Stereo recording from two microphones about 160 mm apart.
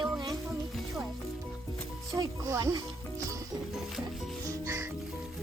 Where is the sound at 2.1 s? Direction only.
20° right (ahead or behind).